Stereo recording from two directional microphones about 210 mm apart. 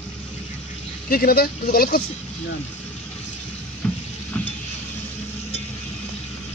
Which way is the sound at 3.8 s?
5° left (ahead or behind).